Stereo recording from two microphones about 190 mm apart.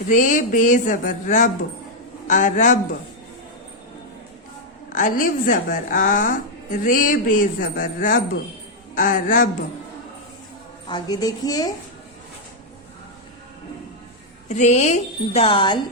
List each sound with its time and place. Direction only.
0.1 s a woman's voice: 45° left (ahead or behind)
4.9 s a woman's voice: 45° left (ahead or behind)
10.8 s a woman's voice: 25° left (ahead or behind)
14.4 s a woman's voice: 40° left (ahead or behind)